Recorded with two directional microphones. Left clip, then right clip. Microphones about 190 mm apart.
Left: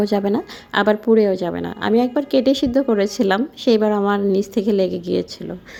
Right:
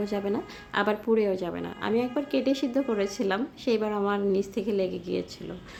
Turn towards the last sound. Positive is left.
turn(degrees=40)  # may be behind; listen again after turning